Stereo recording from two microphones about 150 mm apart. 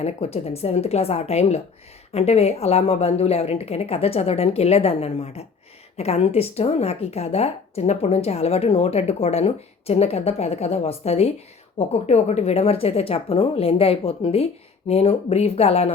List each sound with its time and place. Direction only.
0.0 s a woman's voice: 45° left (ahead or behind)